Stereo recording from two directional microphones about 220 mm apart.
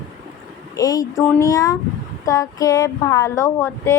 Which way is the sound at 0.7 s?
15° left (ahead or behind).